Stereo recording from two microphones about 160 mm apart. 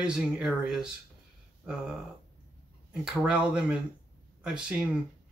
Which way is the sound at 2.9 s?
5° right (ahead or behind).